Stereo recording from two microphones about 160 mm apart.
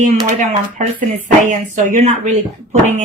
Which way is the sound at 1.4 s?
50° right (ahead or behind).